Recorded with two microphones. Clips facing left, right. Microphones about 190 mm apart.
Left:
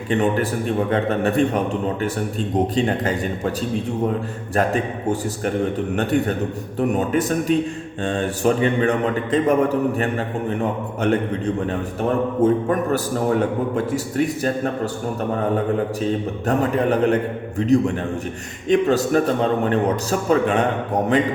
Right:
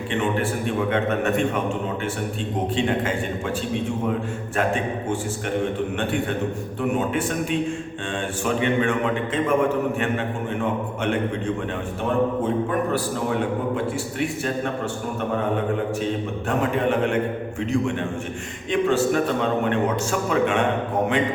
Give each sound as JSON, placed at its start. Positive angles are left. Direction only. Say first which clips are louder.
{"t": 0.1, "sound": "a man's voice", "louder": "left 5 dB", "side_deg": 40}
{"t": 4.5, "sound": "a man's voice", "louder": "left 3 dB", "side_deg": 40}
{"t": 16.5, "sound": "a man's voice", "louder": "left 3 dB", "side_deg": 40}